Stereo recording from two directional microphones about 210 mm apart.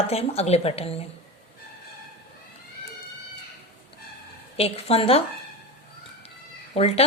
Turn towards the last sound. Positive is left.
turn(degrees=30)  # may be behind; listen again after turning